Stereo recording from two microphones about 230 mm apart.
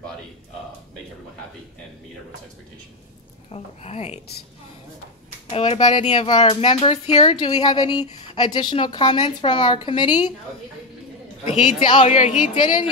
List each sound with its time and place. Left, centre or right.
3.5 s speech: left
5.5 s speech: left
11.4 s speech: left